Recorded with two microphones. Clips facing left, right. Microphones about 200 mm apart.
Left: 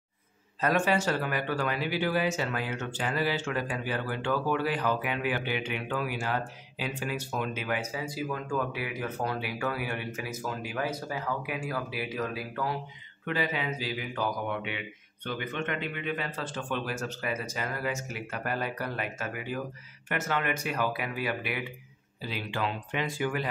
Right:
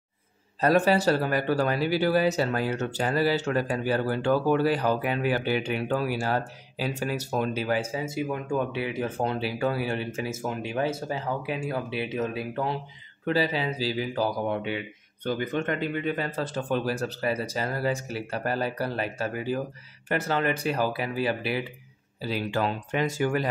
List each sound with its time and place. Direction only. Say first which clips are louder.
0.6 s speech: right 5 dB; 35° right (ahead or behind)
22.2 s speech: right 6 dB; 40° right (ahead or behind)